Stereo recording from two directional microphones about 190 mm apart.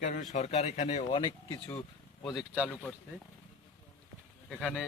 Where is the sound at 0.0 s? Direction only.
40° left (ahead or behind); by 1.5 s 25° left (ahead or behind).